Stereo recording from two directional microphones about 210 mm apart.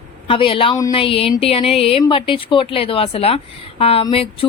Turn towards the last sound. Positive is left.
turn(degrees=25)  # may be behind; listen again after turning